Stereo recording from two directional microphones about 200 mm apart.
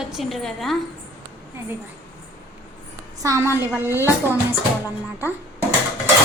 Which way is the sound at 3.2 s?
15° right (ahead or behind).